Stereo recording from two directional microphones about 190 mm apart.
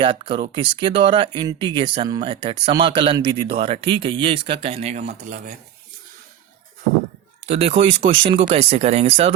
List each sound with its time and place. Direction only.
0.0 s speech: 25° right (ahead or behind)
7.4 s speech: 35° right (ahead or behind)